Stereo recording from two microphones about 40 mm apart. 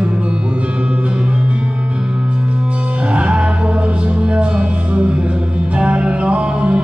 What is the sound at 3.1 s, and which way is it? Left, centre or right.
Music, right.